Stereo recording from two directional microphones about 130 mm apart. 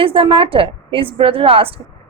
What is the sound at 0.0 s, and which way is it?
A woman's voice, 45° right (ahead or behind).